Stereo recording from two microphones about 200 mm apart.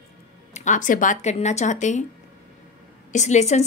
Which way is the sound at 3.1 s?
35° left (ahead or behind).